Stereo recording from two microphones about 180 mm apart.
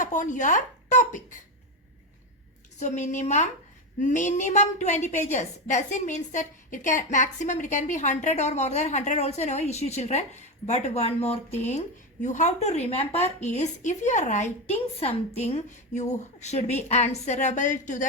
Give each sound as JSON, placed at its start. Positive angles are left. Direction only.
{"t": 0.0, "sound": "speech", "side_deg": 45}
{"t": 2.7, "sound": "a woman's voice", "side_deg": 40}